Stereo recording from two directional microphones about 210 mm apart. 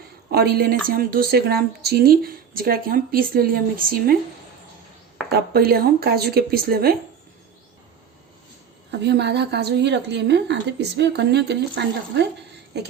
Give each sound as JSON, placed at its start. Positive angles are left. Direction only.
{"t": 0.3, "sound": "a woman's voice", "side_deg": -50}
{"t": 5.5, "sound": "a woman's voice", "side_deg": -45}
{"t": 8.9, "sound": "a woman's voice", "side_deg": -55}